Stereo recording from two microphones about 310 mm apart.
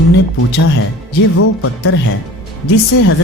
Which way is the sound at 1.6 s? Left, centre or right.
Left.